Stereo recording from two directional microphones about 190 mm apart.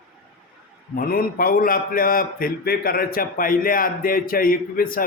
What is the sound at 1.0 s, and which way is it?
A man's voice, 50° left (ahead or behind).